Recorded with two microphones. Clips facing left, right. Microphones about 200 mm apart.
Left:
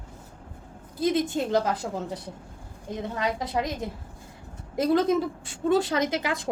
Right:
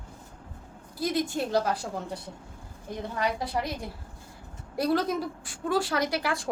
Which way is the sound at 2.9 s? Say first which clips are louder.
Left 1 dB; 20° left (ahead or behind).